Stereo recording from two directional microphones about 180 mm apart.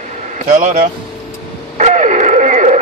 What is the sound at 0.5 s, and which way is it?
Speech, 45° right (ahead or behind).